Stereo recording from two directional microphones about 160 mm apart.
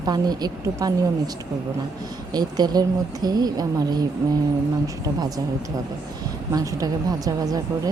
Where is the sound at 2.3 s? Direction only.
25° right (ahead or behind).